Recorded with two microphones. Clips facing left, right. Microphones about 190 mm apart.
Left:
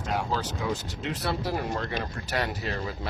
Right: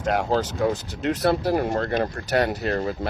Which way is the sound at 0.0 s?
75° right (ahead or behind).